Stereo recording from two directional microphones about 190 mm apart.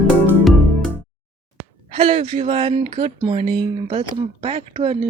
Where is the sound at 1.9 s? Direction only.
30° right (ahead or behind).